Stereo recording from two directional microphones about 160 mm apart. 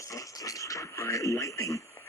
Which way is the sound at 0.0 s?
20° left (ahead or behind).